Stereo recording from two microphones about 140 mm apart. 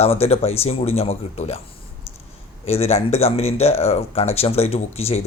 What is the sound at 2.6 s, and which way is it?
Speech, 45° left (ahead or behind).